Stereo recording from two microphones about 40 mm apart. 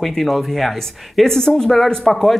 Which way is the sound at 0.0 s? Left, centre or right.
Centre.